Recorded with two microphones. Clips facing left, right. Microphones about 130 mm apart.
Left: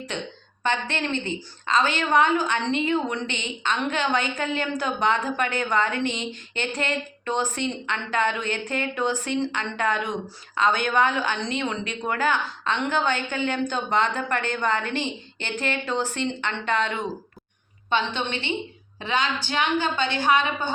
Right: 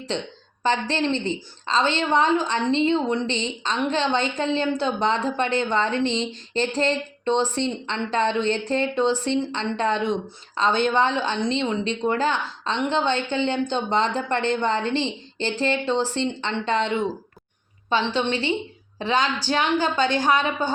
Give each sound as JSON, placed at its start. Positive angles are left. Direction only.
{"t": 0.6, "sound": "a woman's voice", "side_deg": -30}